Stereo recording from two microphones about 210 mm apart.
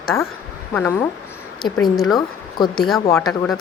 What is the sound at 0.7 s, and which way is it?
A woman's voice, 10° left (ahead or behind).